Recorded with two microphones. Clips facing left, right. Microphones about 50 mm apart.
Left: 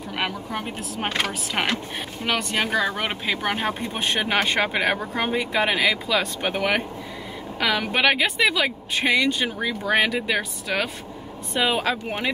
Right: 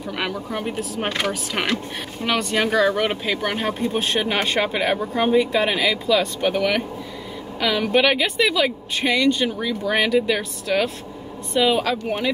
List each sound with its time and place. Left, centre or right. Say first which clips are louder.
0.1 s speech: right 1 dB; centre
4.9 s speech: right 4 dB; left
5.2 s speech: right 5 dB; centre
11.5 s speech: right 3 dB; left